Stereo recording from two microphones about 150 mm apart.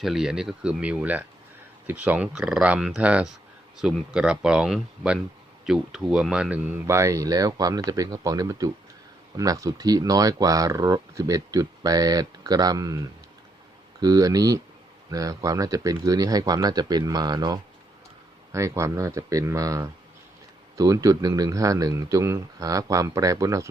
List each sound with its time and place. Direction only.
0.0 s speech: centre (ahead or behind); by 13.0 s 25° right (ahead or behind)
14.0 s speech: 25° right (ahead or behind)